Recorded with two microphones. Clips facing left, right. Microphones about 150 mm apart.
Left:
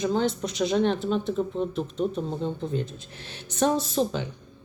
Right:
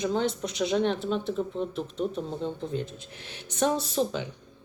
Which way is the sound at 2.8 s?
15° right (ahead or behind).